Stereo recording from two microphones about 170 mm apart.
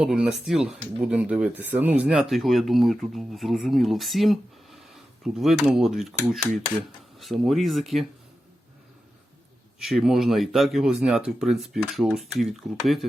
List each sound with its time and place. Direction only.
0.0 s speech: 5° right (ahead or behind)
9.7 s speech: centre (ahead or behind)